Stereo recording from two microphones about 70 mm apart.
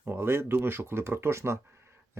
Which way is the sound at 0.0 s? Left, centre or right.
Right.